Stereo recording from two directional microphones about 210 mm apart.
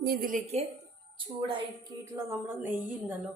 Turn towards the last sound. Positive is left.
turn(degrees=-10)  # may be behind; listen again after turning